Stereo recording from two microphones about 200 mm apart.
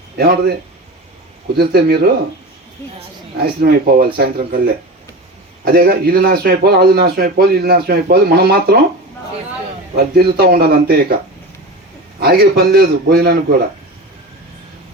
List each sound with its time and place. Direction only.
0.2 s a man's voice: 50° right (ahead or behind)
1.5 s a man's voice: 55° right (ahead or behind)
3.4 s a man's voice: 50° right (ahead or behind)
5.6 s a man's voice: 50° right (ahead or behind)
9.9 s a man's voice: 50° right (ahead or behind)
12.2 s a man's voice: 50° right (ahead or behind)